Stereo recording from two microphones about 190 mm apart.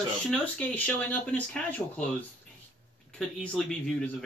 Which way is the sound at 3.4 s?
5° left (ahead or behind).